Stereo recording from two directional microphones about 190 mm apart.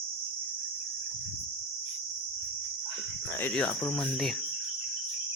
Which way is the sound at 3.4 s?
10° left (ahead or behind).